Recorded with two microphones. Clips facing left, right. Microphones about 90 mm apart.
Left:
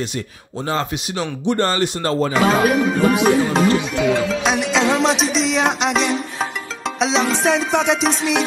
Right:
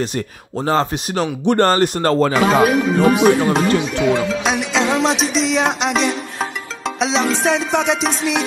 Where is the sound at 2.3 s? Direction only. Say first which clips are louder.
Right 2 dB; centre (ahead or behind).